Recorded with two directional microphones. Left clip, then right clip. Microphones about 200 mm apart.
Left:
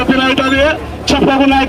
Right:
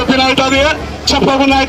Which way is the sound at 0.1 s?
35° right (ahead or behind).